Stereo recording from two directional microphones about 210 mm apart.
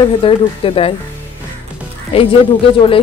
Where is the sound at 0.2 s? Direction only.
25° left (ahead or behind).